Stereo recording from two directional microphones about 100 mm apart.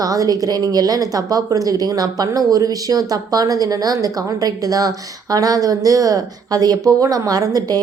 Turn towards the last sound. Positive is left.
turn(degrees=-40)  # may be behind; listen again after turning